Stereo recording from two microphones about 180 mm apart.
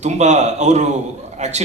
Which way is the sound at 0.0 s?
40° right (ahead or behind).